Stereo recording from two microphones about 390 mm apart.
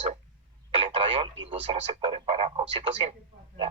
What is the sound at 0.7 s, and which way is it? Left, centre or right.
Radio, centre.